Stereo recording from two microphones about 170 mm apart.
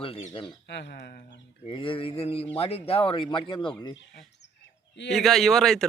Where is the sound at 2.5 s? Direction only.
35° left (ahead or behind).